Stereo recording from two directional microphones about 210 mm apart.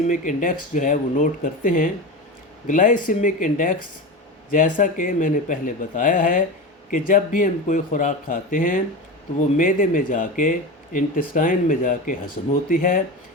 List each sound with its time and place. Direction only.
0.1 s speech: 40° left (ahead or behind)